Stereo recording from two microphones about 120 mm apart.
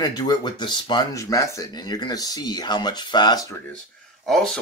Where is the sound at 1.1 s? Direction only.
25° left (ahead or behind).